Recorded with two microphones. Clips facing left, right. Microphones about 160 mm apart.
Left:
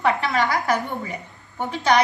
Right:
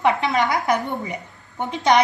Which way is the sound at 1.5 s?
20° right (ahead or behind).